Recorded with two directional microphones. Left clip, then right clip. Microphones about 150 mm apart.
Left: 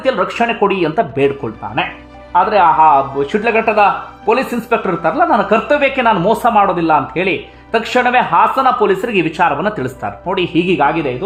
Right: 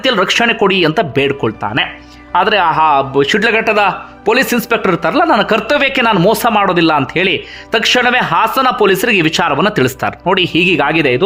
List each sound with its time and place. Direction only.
0.0 s speech: 30° right (ahead or behind)
10.8 s speech: 30° right (ahead or behind)